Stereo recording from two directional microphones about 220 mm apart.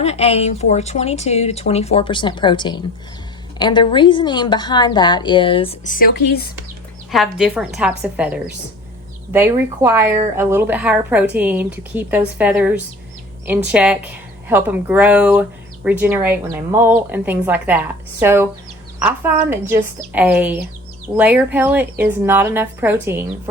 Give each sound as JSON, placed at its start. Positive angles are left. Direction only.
{"t": 0.0, "sound": "a woman's voice", "side_deg": 30}
{"t": 7.1, "sound": "a woman's voice", "side_deg": 0}